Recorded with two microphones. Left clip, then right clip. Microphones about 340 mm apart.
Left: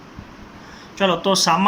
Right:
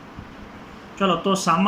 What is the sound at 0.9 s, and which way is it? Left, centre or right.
Speech, left.